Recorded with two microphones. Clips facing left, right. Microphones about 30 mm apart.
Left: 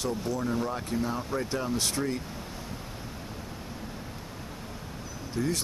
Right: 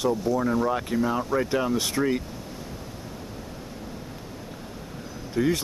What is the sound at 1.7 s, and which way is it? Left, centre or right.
Speech, centre.